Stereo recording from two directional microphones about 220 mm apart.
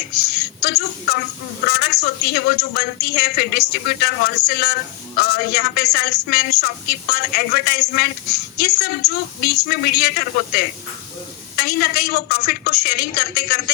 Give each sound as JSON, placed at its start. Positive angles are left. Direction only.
{"t": 0.3, "sound": "a woman's voice", "side_deg": 45}